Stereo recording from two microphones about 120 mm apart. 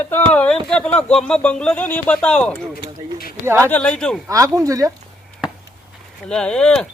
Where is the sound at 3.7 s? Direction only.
10° left (ahead or behind).